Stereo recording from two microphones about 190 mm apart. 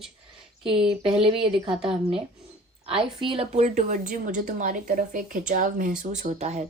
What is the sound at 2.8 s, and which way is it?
A woman's voice, 25° right (ahead or behind).